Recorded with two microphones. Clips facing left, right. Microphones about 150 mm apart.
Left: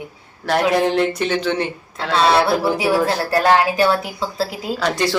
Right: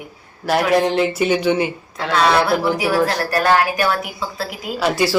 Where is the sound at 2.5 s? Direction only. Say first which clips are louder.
Left 1 dB; 30° left (ahead or behind).